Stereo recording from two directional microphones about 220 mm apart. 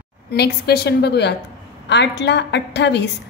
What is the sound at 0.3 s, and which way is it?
A woman's voice, 45° left (ahead or behind).